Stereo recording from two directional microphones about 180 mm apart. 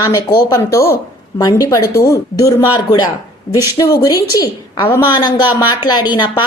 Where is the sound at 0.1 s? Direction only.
15° left (ahead or behind).